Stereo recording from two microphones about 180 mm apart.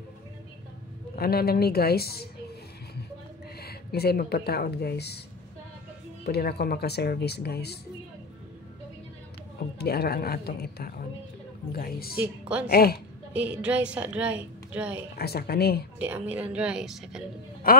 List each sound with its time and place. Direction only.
1.1 s speech: 60° left (ahead or behind)
3.6 s speech: 60° left (ahead or behind)
6.2 s speech: 60° left (ahead or behind)
9.8 s speech: 60° left (ahead or behind)
12.2 s a woman's voice: 10° right (ahead or behind)
12.6 s speech: 55° left (ahead or behind)
13.3 s a woman's voice: 5° right (ahead or behind)
15.1 s speech: 60° left (ahead or behind)
16.0 s a woman's voice: 10° right (ahead or behind)
17.6 s a man's voice: 55° left (ahead or behind)